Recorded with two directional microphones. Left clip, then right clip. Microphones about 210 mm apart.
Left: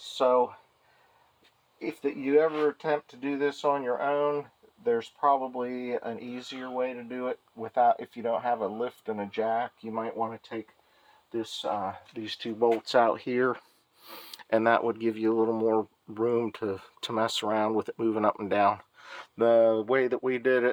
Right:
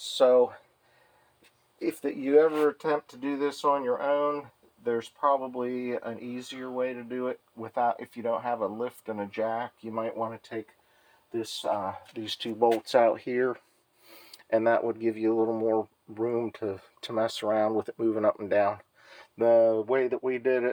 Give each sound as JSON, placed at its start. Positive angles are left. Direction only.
{"t": 0.0, "sound": "a sound", "side_deg": 0}
{"t": 1.9, "sound": "speech", "side_deg": 0}
{"t": 11.8, "sound": "speech", "side_deg": 5}